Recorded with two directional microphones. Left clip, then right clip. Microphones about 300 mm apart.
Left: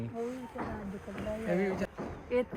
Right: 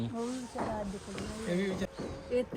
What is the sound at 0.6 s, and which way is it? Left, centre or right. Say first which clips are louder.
Speech: right 4 dB; right.